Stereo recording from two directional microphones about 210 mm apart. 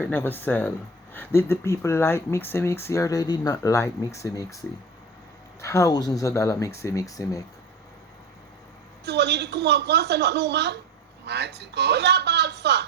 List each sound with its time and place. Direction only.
0.0 s speech: 10° left (ahead or behind)
9.0 s a woman's voice: 55° right (ahead or behind)